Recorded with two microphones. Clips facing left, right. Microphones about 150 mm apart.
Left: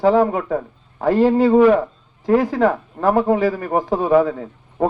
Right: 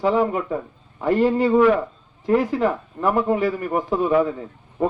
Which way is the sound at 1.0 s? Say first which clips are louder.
Left 4 dB; 90° left.